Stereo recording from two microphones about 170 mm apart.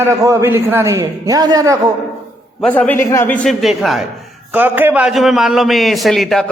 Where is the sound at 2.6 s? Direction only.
10° left (ahead or behind).